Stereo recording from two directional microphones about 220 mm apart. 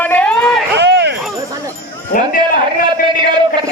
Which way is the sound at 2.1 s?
40° left (ahead or behind).